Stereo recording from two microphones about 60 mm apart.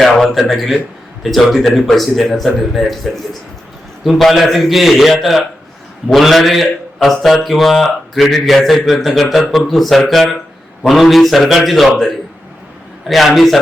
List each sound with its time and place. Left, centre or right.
0.0 s a man's voice: centre